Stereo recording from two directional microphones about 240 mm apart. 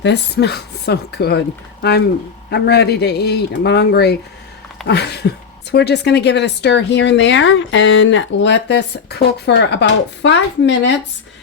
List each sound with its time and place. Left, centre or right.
0.0 s speech: left